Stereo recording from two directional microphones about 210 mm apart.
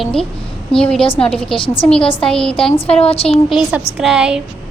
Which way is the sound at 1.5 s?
25° left (ahead or behind).